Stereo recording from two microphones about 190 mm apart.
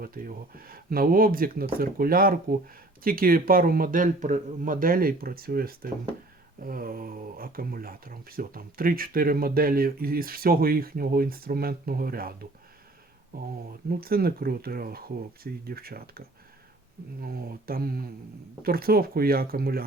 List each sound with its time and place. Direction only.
0.0 s speech: 45° right (ahead or behind)